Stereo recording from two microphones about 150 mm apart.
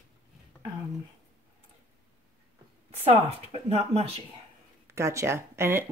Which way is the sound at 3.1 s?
45° right (ahead or behind).